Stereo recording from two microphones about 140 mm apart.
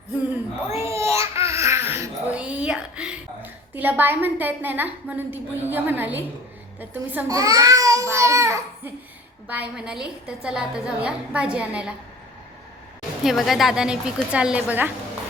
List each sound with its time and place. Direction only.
0.7 s babbling: 20° right (ahead or behind)
6.7 s a woman's voice: 15° right (ahead or behind)
7.3 s a child's voice: 25° right (ahead or behind)
9.5 s a woman's voice: 10° right (ahead or behind)
13.2 s a woman's voice: centre (ahead or behind)